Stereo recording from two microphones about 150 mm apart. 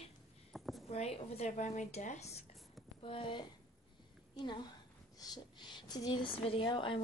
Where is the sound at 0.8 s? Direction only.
45° left (ahead or behind).